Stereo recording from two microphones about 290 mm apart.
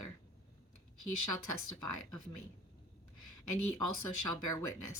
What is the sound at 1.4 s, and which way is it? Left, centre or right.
Speech, left.